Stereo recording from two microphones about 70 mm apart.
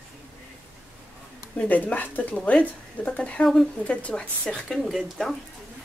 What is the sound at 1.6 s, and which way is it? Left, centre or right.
A woman's voice, left.